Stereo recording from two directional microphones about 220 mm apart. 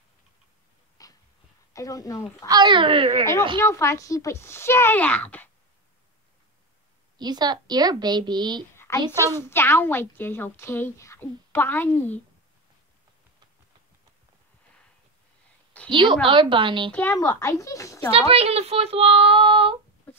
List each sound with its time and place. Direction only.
1.0 s dog: 15° left (ahead or behind)
1.7 s speech: 15° left (ahead or behind)
2.4 s speech: 20° right (ahead or behind)
3.5 s a woman's voice: 10° left (ahead or behind)
7.2 s speech: 20° right (ahead or behind)
8.7 s a sound: 10° left (ahead or behind)
9.2 s a woman's voice: 10° left (ahead or behind)
15.9 s speech: 20° right (ahead or behind)
16.9 s a woman's voice: 10° left (ahead or behind)
18.1 s speech: 30° right (ahead or behind)